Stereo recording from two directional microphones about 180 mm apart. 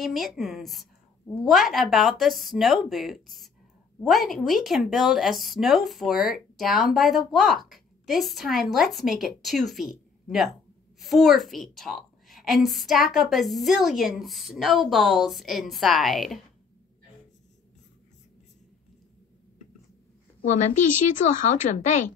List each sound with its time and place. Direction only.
0.0 s a woman's voice: centre (ahead or behind)
20.4 s a woman's voice: 40° left (ahead or behind)